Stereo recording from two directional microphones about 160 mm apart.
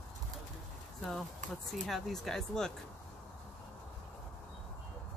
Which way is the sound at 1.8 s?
Centre (ahead or behind).